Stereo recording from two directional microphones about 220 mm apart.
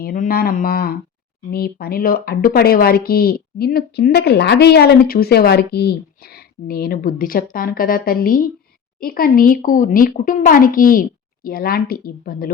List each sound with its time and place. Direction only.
0.0 s speech: 40° left (ahead or behind)